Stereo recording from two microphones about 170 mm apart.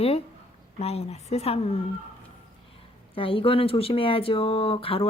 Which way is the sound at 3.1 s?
30° left (ahead or behind).